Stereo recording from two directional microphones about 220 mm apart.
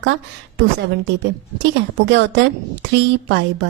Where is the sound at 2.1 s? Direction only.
55° right (ahead or behind).